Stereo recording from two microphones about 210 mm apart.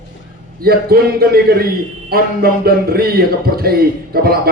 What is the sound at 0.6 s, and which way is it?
A man's voice, 45° right (ahead or behind).